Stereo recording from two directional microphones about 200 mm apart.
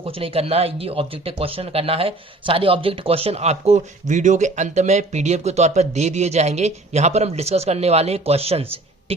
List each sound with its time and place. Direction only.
0.0 s speech: 30° right (ahead or behind)